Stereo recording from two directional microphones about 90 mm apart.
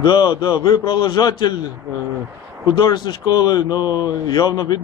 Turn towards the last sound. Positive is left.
turn(degrees=50)  # may be behind; listen again after turning